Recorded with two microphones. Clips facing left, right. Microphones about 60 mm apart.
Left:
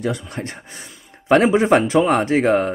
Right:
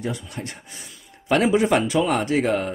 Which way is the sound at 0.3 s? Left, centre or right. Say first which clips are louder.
Left 4 dB; left.